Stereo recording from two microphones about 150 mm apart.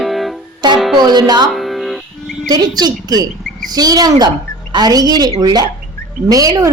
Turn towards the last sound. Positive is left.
turn(degrees=-25)  # may be behind; listen again after turning